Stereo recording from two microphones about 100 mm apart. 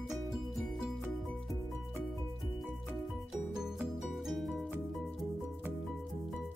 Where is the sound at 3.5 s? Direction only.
5° right (ahead or behind).